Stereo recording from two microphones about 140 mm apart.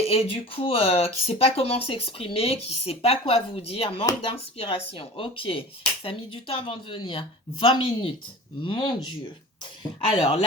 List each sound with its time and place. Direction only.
0.0 s speech: 45° left (ahead or behind)